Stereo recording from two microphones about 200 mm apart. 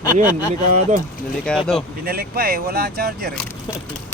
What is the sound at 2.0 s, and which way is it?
Speech, 50° right (ahead or behind).